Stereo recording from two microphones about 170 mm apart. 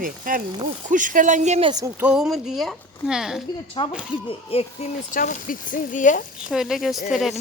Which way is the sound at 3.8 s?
30° left (ahead or behind).